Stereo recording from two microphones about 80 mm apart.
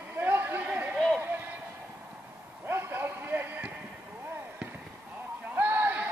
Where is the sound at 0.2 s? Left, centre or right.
Right.